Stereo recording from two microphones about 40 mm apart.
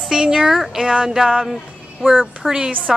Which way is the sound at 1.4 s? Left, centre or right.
Centre.